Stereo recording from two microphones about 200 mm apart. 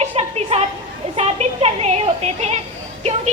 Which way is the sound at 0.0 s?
30° right (ahead or behind).